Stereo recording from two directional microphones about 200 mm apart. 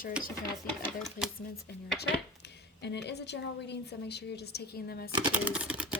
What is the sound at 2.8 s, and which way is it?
A woman's voice, 60° left (ahead or behind).